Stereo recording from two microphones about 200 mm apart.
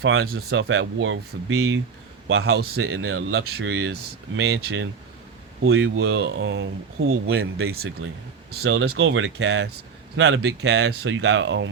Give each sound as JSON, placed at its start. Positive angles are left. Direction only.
{"t": 0.0, "sound": "speech", "side_deg": -80}
{"t": 2.4, "sound": "a man's voice", "side_deg": -55}
{"t": 2.9, "sound": "speech", "side_deg": -80}
{"t": 3.7, "sound": "speech", "side_deg": -85}
{"t": 5.6, "sound": "speech", "side_deg": -75}
{"t": 8.0, "sound": "speech", "side_deg": -75}
{"t": 8.4, "sound": "a man's voice", "side_deg": -55}
{"t": 9.0, "sound": "speech", "side_deg": -80}
{"t": 10.2, "sound": "speech", "side_deg": -70}